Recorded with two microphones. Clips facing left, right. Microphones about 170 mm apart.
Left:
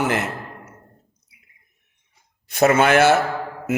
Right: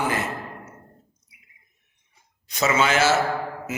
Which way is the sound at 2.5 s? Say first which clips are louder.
Left 6 dB; 55° left (ahead or behind).